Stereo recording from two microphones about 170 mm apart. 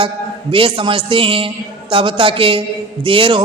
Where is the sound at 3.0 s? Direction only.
30° right (ahead or behind).